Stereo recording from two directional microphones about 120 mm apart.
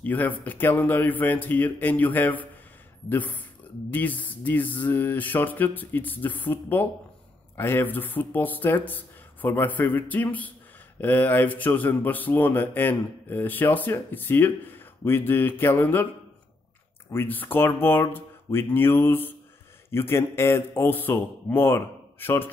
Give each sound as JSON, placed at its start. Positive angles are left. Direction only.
{"t": 0.0, "sound": "speech", "side_deg": 15}
{"t": 17.1, "sound": "a man's voice", "side_deg": 15}